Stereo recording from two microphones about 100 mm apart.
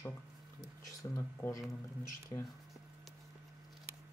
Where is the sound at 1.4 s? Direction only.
25° left (ahead or behind).